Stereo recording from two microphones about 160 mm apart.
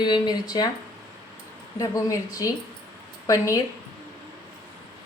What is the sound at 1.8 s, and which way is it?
Speech, 20° left (ahead or behind).